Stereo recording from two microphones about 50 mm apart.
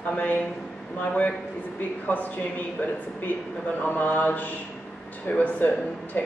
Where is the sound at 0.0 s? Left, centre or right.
Left.